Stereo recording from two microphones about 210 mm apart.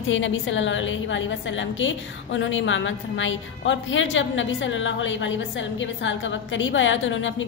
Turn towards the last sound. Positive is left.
turn(degrees=65)  # may be behind; listen again after turning